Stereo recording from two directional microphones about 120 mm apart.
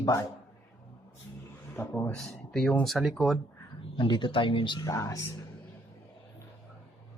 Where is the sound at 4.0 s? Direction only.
40° left (ahead or behind).